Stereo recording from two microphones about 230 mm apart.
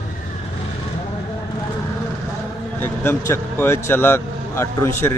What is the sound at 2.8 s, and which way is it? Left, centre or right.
Speech, centre.